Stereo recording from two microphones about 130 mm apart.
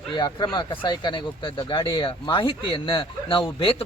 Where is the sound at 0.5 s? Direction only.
40° left (ahead or behind).